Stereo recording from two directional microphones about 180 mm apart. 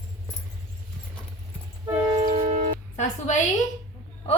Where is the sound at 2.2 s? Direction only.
40° right (ahead or behind).